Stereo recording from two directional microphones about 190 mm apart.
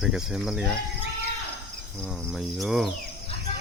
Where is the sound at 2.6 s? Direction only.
Centre (ahead or behind).